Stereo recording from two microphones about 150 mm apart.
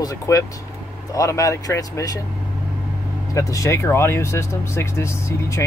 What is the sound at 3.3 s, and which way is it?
Speech, 20° left (ahead or behind).